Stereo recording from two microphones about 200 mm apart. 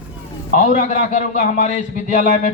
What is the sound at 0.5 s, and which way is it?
Speech, 35° left (ahead or behind).